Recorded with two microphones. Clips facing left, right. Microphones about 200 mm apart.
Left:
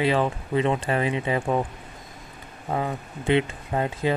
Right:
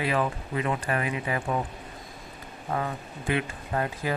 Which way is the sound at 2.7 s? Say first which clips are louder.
Left 3 dB; 20° left (ahead or behind).